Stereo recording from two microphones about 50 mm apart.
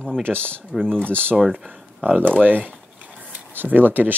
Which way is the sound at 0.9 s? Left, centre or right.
Left.